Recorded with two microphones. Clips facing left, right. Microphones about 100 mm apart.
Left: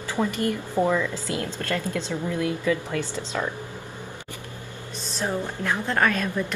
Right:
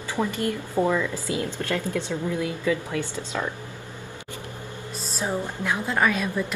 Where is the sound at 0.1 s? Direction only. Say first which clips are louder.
Left 1 dB; 15° right (ahead or behind).